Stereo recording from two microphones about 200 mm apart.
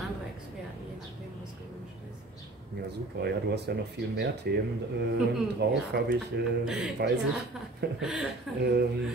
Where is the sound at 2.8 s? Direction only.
55° right (ahead or behind).